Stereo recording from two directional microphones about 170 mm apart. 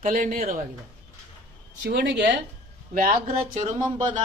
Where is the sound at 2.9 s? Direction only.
50° right (ahead or behind).